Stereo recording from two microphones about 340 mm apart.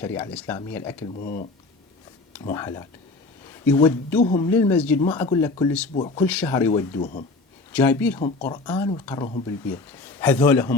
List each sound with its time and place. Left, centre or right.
0.0 s speech: centre
0.9 s speech: left
2.4 s speech: centre
7.0 s speech: left
7.7 s speech: centre